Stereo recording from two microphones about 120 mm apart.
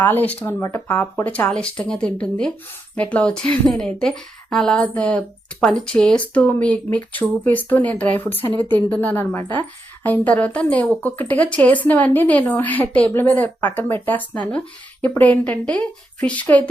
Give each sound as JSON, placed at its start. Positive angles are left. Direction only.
{"t": 0.0, "sound": "speech", "side_deg": 15}